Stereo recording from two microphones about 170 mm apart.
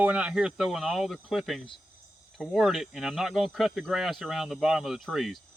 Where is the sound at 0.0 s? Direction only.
10° right (ahead or behind).